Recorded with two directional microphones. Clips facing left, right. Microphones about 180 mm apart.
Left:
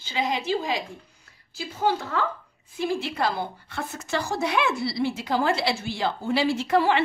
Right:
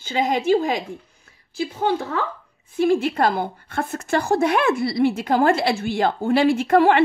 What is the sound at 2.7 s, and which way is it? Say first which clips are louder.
A woman's voice: right 8 dB; 50° right (ahead or behind).